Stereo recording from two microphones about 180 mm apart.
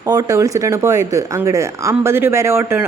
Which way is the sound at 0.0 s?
20° right (ahead or behind).